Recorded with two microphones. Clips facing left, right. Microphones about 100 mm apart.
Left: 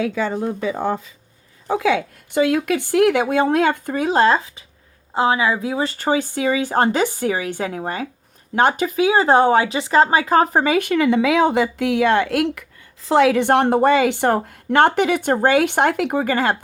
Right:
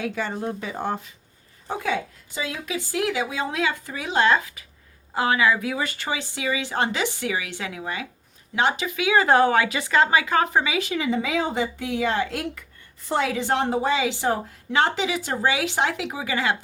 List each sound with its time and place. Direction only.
1.6 s a woman's voice: 85° left; by 12.6 s 65° left (ahead or behind)
13.1 s a woman's voice: 80° left; by 16.6 s 50° left (ahead or behind)